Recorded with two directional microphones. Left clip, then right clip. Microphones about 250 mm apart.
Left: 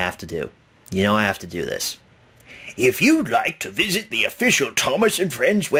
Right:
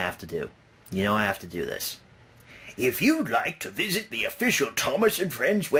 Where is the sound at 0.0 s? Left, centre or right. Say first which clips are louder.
Left 5 dB; left.